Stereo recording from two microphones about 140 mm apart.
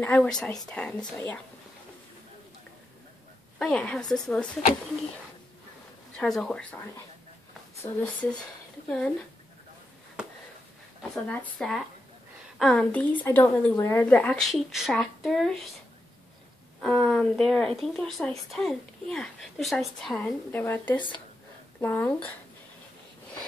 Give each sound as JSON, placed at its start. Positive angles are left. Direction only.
{"t": 0.0, "sound": "a woman's voice", "side_deg": 10}
{"t": 3.5, "sound": "a woman's voice", "side_deg": 5}
{"t": 6.1, "sound": "a woman's voice", "side_deg": 5}
{"t": 11.0, "sound": "a woman's voice", "side_deg": 10}
{"t": 16.8, "sound": "a woman's voice", "side_deg": 5}
{"t": 20.5, "sound": "a woman's voice", "side_deg": 15}